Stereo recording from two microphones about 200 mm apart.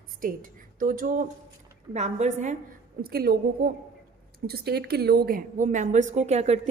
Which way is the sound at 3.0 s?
50° right (ahead or behind).